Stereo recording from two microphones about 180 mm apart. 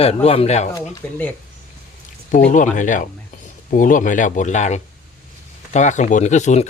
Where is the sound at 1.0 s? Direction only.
15° left (ahead or behind).